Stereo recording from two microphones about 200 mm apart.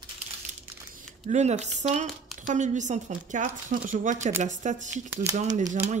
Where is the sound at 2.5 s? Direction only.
35° right (ahead or behind).